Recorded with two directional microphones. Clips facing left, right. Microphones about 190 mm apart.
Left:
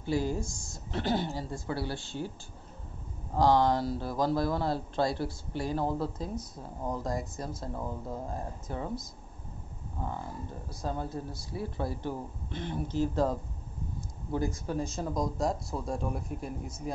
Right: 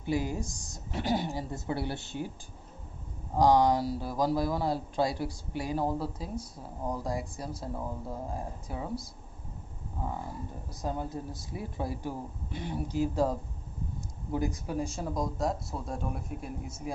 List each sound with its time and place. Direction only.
0.0 s speech: 15° right (ahead or behind)
3.3 s speech: 15° right (ahead or behind)
10.7 s speech: 15° right (ahead or behind)